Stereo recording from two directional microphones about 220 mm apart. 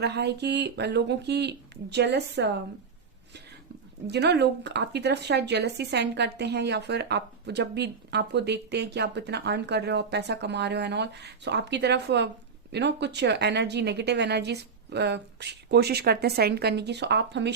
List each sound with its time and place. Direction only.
0.0 s speech: 50° right (ahead or behind)
4.0 s speech: 50° right (ahead or behind)